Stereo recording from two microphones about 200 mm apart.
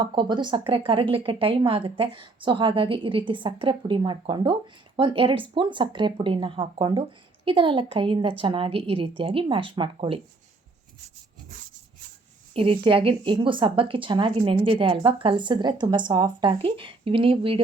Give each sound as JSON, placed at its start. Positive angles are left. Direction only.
{"t": 0.0, "sound": "a woman's voice", "side_deg": -25}
{"t": 12.5, "sound": "a woman's voice", "side_deg": -25}